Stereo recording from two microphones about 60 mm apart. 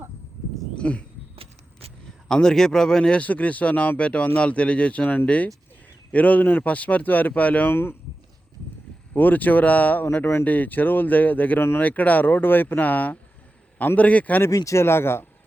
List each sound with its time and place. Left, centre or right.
0.8 s a sound: left
2.2 s speech: centre
7.7 s speech: left
9.1 s speech: left
10.4 s speech: left
14.5 s speech: left
14.8 s speech: left